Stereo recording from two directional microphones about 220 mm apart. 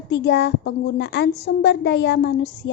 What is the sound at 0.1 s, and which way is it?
A woman's voice, 50° left (ahead or behind).